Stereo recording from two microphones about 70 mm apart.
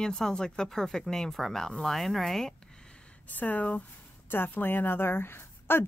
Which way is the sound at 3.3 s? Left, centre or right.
Left.